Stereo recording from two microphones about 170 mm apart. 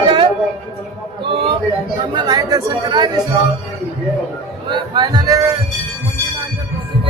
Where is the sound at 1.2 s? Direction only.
30° right (ahead or behind).